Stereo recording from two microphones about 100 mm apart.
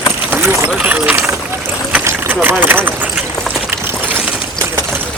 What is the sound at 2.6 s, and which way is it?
Speech, 20° right (ahead or behind).